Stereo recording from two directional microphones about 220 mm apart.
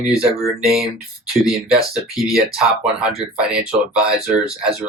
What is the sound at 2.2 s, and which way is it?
Speech, centre (ahead or behind).